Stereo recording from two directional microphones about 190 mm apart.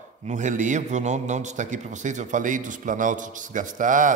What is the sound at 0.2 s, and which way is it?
A man's voice, 40° right (ahead or behind).